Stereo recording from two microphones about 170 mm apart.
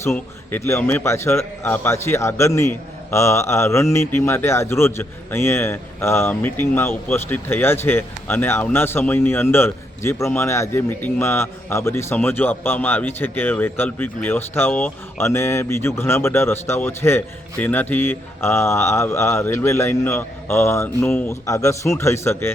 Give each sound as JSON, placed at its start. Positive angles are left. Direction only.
{"t": 0.0, "sound": "a man's voice", "side_deg": 15}